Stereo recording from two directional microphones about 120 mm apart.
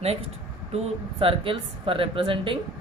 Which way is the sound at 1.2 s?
50° right (ahead or behind).